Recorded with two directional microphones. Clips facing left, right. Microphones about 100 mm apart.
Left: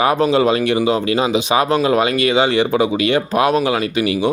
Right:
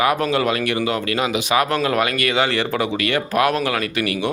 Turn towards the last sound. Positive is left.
turn(degrees=20)  # may be behind; listen again after turning